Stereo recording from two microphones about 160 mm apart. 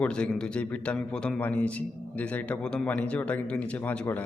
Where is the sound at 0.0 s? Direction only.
5° left (ahead or behind).